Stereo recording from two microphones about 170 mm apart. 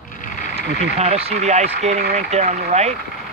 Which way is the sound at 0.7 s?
40° right (ahead or behind).